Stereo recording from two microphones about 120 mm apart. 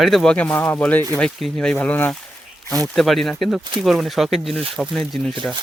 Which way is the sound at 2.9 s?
Centre (ahead or behind).